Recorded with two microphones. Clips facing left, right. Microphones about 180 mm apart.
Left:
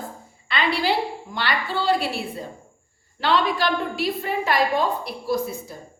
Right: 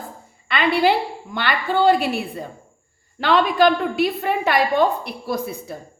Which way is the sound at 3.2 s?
55° right (ahead or behind).